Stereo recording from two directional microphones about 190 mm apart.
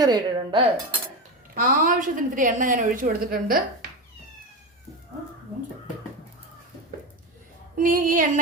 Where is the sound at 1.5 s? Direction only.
50° right (ahead or behind).